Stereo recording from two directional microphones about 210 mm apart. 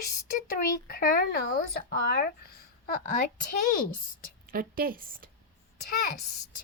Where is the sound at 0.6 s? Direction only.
45° left (ahead or behind).